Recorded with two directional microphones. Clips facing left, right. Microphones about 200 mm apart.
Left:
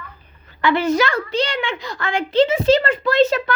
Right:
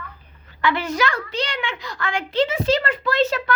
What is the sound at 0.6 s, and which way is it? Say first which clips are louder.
A woman's voice: left 5 dB; 25° left (ahead or behind).